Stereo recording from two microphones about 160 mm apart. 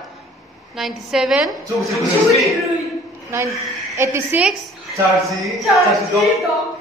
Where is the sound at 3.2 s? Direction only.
15° right (ahead or behind).